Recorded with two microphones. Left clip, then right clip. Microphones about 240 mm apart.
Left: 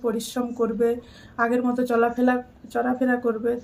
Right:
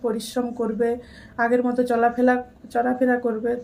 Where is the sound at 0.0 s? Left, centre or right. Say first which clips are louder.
Right 1 dB; centre.